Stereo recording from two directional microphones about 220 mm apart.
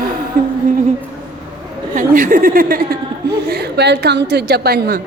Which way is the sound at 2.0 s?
35° right (ahead or behind).